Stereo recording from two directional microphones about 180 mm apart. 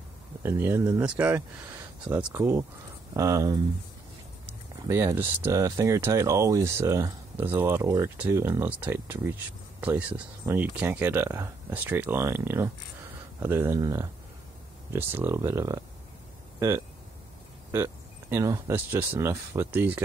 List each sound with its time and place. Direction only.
0.4 s speech: 15° right (ahead or behind)
4.8 s speech: 15° right (ahead or behind)